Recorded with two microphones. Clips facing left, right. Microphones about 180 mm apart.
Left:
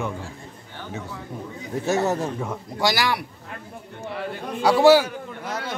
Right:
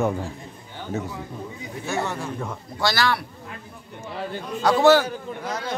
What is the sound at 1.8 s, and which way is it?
Speech, 40° left (ahead or behind).